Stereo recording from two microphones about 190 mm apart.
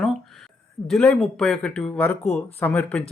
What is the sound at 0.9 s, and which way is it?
Speech, 5° left (ahead or behind).